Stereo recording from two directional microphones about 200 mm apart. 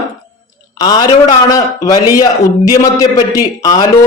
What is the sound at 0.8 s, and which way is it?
A man's voice, 20° left (ahead or behind).